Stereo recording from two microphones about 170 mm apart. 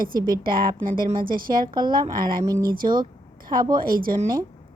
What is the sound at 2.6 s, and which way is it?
A woman's voice, 55° right (ahead or behind).